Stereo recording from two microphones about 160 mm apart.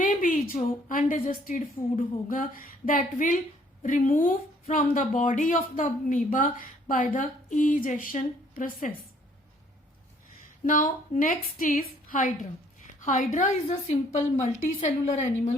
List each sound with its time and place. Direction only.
0.0 s a woman's voice: 55° left (ahead or behind)
10.7 s a woman's voice: 60° left (ahead or behind)